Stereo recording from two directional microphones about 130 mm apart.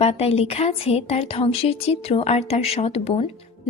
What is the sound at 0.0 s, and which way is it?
A woman's voice, 50° left (ahead or behind).